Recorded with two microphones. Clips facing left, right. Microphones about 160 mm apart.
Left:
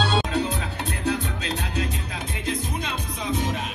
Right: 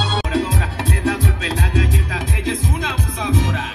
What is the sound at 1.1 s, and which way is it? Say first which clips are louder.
Music: right 3 dB; 90° right.